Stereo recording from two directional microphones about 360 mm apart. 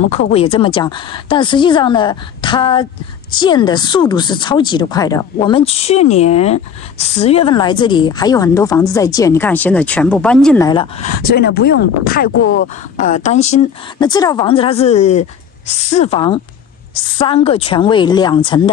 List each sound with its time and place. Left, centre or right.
0.1 s speech: centre
13.0 s speech: centre